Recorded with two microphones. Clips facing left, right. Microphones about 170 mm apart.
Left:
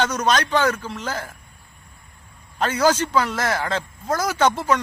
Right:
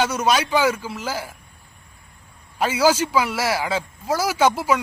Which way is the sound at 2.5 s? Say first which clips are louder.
Right 1 dB; 10° right (ahead or behind).